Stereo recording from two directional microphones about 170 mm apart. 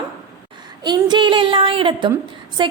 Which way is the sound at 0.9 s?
25° right (ahead or behind).